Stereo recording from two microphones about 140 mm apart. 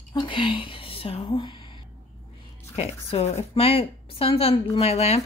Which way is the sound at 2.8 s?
45° left (ahead or behind).